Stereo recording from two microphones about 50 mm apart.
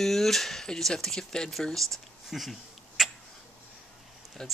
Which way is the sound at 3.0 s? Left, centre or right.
Centre.